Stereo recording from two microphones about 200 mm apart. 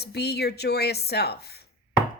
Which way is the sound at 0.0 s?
55° left (ahead or behind).